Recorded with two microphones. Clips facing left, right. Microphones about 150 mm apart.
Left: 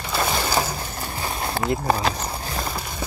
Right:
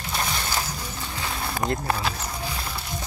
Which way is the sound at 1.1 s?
30° left (ahead or behind).